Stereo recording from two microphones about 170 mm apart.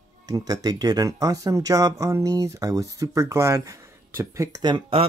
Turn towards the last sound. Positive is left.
turn(degrees=-30)  # may be behind; listen again after turning